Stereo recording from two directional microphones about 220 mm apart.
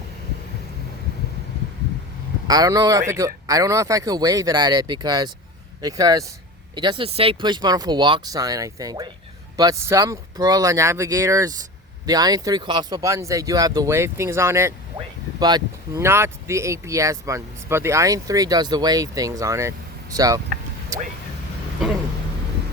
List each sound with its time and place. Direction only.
2.5 s speech: 15° right (ahead or behind)